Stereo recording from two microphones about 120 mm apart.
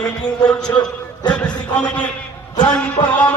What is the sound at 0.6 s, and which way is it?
Music, 10° left (ahead or behind).